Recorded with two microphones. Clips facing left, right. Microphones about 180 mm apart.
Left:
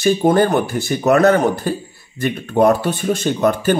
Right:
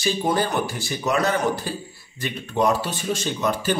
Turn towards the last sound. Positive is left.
turn(degrees=55)  # may be behind; listen again after turning